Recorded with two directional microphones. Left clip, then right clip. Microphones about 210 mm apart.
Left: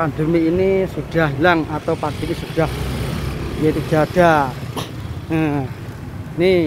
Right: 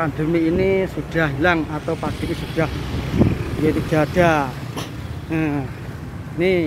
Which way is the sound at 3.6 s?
45° left (ahead or behind).